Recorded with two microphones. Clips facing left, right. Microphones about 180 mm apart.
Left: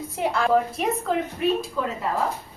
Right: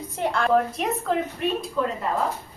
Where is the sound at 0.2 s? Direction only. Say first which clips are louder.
Even; 5° left (ahead or behind).